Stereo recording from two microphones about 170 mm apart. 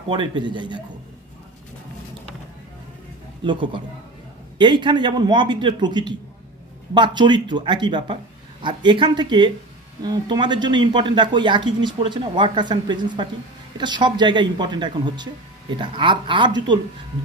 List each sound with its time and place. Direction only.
0.1 s speech: 25° right (ahead or behind)
3.4 s speech: 30° right (ahead or behind)